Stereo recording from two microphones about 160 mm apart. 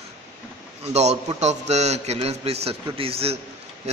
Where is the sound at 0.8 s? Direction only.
40° right (ahead or behind).